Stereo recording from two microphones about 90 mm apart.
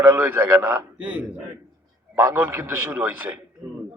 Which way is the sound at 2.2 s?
25° right (ahead or behind).